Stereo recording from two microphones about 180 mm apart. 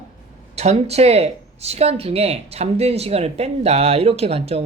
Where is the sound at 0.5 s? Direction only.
40° right (ahead or behind).